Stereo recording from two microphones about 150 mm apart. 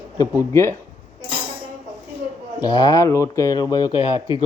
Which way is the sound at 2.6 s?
25° left (ahead or behind).